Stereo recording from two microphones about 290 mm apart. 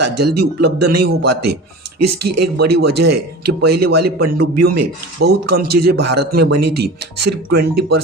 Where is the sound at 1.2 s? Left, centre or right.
Right.